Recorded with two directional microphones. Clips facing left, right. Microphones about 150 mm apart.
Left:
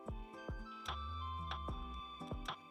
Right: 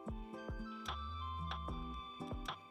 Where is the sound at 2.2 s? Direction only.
Centre (ahead or behind).